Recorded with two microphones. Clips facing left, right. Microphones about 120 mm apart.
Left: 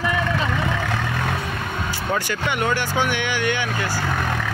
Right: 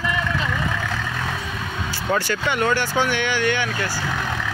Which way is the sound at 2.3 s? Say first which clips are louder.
Right 1 dB; 15° left (ahead or behind).